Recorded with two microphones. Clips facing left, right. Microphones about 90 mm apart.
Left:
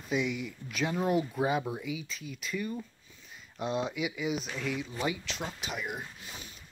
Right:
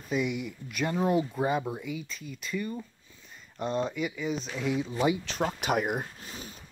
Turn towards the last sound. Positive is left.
turn(degrees=-45)  # may be behind; listen again after turning